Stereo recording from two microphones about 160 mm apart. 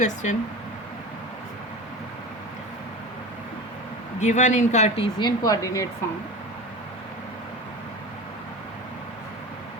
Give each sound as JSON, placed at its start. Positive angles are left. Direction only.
{"t": 0.0, "sound": "speech", "side_deg": 45}
{"t": 4.2, "sound": "speech", "side_deg": 50}
{"t": 5.5, "sound": "speech", "side_deg": 20}